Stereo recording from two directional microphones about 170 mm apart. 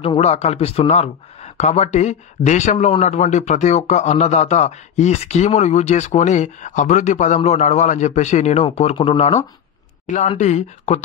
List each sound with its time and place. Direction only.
0.0 s speech: 35° left (ahead or behind)
10.0 s speech: 45° left (ahead or behind)